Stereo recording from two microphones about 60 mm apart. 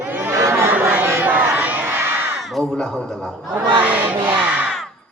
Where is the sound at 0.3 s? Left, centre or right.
Right.